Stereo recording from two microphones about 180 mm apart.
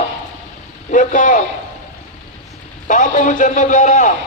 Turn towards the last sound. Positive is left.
turn(degrees=45)  # may be behind; listen again after turning